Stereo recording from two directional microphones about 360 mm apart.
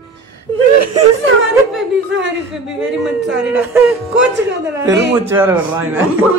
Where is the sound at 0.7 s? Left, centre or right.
Right.